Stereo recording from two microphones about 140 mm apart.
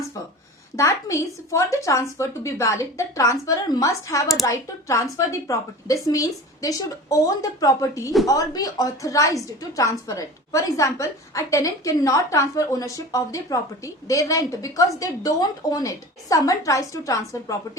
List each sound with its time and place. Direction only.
0.8 s a woman's voice: 25° left (ahead or behind)